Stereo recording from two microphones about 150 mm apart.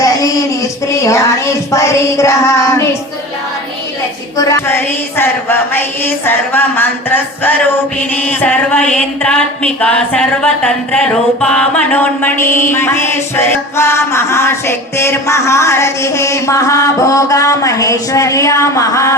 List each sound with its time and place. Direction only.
0.0 s music: 20° left (ahead or behind)
4.4 s a sound: 20° left (ahead or behind)
12.7 s music: 15° left (ahead or behind)